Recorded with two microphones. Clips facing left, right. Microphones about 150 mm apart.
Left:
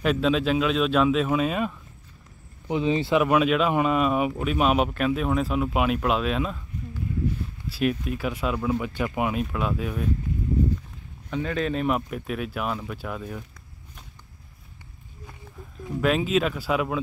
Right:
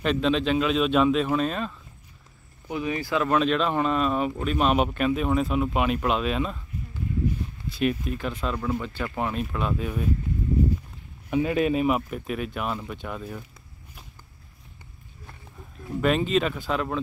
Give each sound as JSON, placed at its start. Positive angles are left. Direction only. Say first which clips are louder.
{"t": 0.0, "sound": "speech", "louder": "left 1 dB", "side_deg": 5}
{"t": 2.7, "sound": "speech", "louder": "left 5 dB", "side_deg": 20}
{"t": 3.3, "sound": "speech", "louder": "left 2 dB", "side_deg": 10}
{"t": 7.7, "sound": "speech", "louder": "even", "side_deg": 0}
{"t": 11.2, "sound": "speech", "louder": "right 4 dB", "side_deg": -15}
{"t": 16.0, "sound": "speech", "louder": "even", "side_deg": 0}